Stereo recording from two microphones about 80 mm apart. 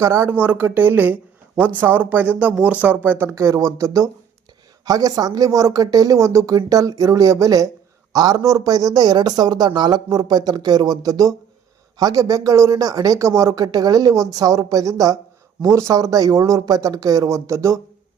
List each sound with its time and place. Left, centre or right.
0.0 s speech: right
0.3 s speech: right
3.3 s a man's voice: right